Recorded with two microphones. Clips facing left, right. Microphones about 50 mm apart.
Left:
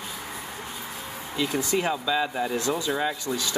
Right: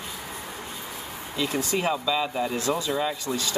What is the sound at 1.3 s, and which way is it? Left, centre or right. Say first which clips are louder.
Speech: left 1 dB; centre.